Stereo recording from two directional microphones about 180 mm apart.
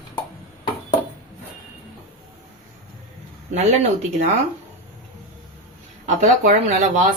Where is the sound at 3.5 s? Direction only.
35° right (ahead or behind).